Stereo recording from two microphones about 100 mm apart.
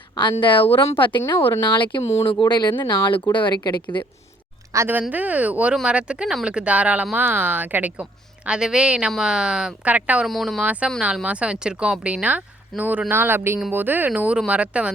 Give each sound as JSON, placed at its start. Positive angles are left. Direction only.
{"t": 0.4, "sound": "speech", "side_deg": 60}
{"t": 4.7, "sound": "a woman's voice", "side_deg": -30}
{"t": 4.9, "sound": "a woman's voice", "side_deg": -15}
{"t": 10.2, "sound": "speech", "side_deg": 0}
{"t": 10.6, "sound": "a woman's voice", "side_deg": -15}